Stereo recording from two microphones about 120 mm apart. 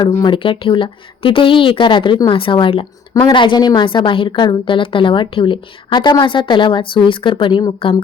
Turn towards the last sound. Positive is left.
turn(degrees=45)  # may be behind; listen again after turning